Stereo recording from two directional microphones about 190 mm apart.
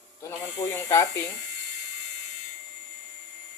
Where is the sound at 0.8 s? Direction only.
15° left (ahead or behind).